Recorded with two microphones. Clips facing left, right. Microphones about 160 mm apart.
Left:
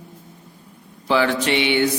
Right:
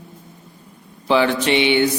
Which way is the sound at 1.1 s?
20° right (ahead or behind).